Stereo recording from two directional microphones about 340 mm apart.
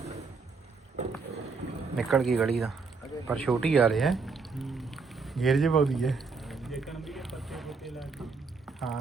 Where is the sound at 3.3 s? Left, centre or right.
Centre.